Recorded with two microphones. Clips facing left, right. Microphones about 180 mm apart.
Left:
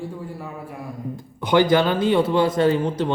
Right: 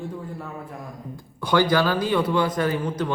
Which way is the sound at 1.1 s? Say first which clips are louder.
Left 3 dB; 20° left (ahead or behind).